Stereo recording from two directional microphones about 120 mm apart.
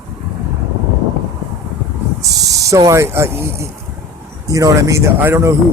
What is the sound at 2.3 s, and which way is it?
Speech, 30° right (ahead or behind).